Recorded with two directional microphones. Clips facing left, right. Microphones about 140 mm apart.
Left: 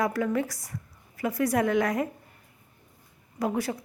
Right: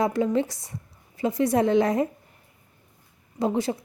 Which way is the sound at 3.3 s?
25° right (ahead or behind).